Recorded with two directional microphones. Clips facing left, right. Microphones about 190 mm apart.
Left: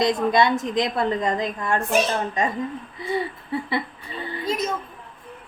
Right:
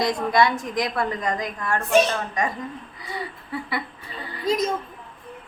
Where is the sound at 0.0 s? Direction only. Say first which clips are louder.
Left 1 dB; 20° left (ahead or behind).